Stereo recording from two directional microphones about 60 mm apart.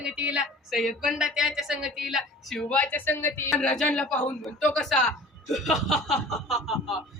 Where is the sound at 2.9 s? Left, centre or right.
Left.